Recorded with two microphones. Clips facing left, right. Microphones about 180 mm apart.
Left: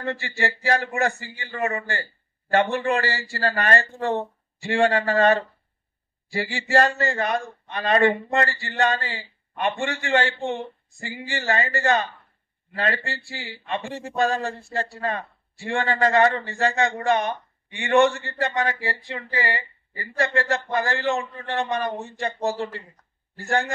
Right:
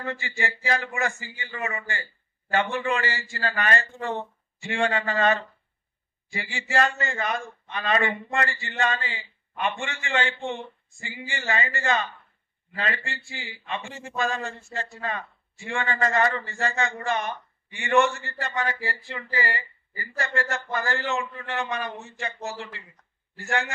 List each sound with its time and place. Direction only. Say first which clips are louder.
0.0 s a man's voice: left 4 dB; 40° left (ahead or behind)